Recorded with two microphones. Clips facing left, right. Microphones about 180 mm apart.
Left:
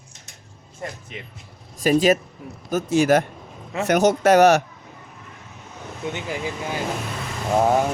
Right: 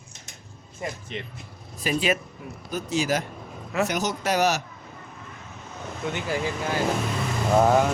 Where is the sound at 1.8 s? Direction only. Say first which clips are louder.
Left 8 dB; 45° left (ahead or behind).